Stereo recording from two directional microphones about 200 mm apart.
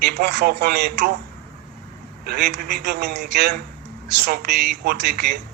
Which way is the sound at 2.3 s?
50° right (ahead or behind).